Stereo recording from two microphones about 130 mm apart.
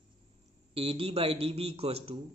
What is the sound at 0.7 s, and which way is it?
Mantra, 50° right (ahead or behind).